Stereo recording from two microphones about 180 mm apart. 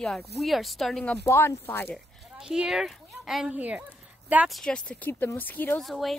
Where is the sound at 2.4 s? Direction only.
5° right (ahead or behind).